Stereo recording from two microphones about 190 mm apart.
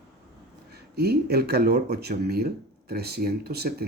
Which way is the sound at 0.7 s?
60° right (ahead or behind).